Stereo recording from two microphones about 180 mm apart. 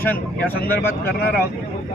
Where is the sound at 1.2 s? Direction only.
60° left (ahead or behind).